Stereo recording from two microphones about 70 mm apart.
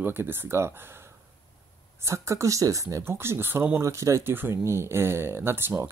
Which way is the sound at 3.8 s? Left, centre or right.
Right.